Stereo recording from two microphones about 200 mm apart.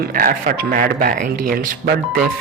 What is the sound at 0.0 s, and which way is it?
A man's voice, 45° right (ahead or behind).